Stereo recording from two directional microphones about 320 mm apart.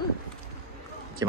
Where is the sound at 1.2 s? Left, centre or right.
Centre.